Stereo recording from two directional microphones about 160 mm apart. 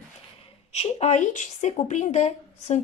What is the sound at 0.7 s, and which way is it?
Speech, 40° left (ahead or behind).